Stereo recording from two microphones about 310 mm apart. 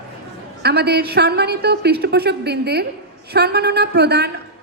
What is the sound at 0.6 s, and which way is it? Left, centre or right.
A woman's voice, right.